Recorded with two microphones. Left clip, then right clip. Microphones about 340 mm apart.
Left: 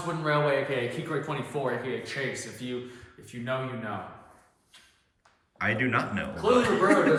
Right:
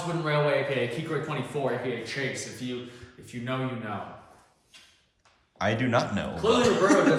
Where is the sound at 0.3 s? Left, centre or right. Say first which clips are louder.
Even; centre.